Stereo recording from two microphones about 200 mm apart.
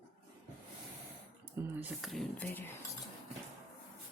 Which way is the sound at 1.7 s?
5° right (ahead or behind).